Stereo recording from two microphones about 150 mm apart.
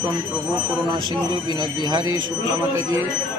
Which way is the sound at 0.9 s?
30° right (ahead or behind).